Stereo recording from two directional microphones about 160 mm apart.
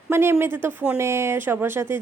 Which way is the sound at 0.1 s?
15° right (ahead or behind).